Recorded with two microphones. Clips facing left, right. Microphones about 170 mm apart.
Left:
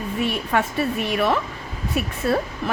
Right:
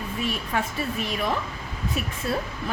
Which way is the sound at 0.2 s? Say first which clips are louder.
Left 5 dB; 65° left (ahead or behind).